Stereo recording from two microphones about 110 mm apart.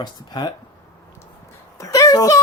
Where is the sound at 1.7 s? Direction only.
30° left (ahead or behind).